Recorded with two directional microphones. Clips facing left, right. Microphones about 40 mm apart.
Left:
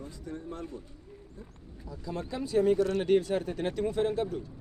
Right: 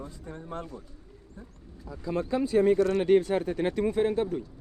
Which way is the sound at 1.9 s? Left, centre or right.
Right.